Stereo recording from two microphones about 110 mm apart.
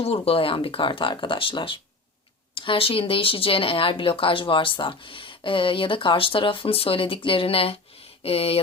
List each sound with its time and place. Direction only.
0.0 s speech: 60° left (ahead or behind)